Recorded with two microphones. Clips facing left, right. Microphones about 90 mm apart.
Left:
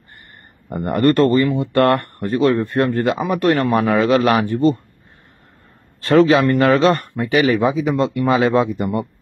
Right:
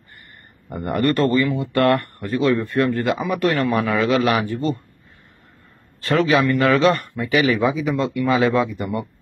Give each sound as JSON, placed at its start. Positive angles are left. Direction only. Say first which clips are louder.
{"t": 0.7, "sound": "speech", "louder": "left 5 dB", "side_deg": 35}
{"t": 6.0, "sound": "speech", "louder": "left 5 dB", "side_deg": 40}